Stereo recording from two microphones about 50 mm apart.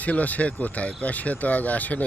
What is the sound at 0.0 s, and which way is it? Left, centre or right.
Speech, left.